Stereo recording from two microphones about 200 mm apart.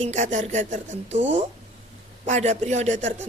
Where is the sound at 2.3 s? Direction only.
35° right (ahead or behind).